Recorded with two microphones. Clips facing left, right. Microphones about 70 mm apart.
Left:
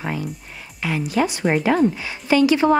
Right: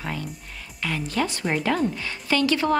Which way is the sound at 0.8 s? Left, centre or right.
Centre.